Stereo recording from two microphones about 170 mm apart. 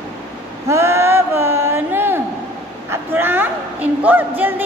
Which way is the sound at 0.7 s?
15° right (ahead or behind).